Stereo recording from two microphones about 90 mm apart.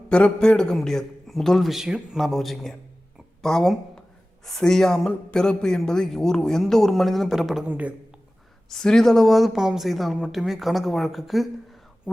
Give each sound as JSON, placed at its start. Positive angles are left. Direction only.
{"t": 0.1, "sound": "speech", "side_deg": 10}
{"t": 7.6, "sound": "a man's voice", "side_deg": -15}
{"t": 8.7, "sound": "speech", "side_deg": 5}